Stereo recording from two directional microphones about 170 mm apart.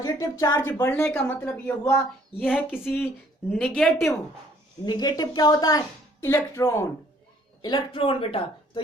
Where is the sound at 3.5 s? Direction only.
5° left (ahead or behind).